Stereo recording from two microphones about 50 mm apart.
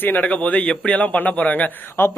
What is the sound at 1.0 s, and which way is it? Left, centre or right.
Speech, left.